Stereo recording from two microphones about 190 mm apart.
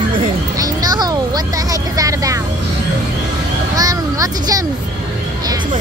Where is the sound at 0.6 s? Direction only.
20° right (ahead or behind).